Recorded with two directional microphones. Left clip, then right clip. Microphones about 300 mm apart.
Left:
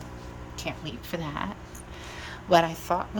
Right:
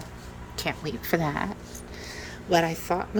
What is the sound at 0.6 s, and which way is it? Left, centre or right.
Speech, centre.